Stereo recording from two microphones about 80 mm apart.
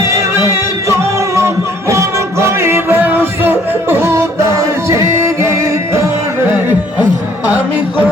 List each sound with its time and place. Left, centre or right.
0.0 s music: right